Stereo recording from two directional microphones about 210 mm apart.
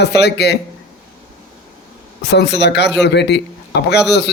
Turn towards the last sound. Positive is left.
turn(degrees=50)  # may be behind; listen again after turning